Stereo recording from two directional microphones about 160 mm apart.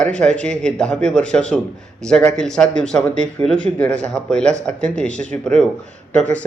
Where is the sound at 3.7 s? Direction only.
5° left (ahead or behind).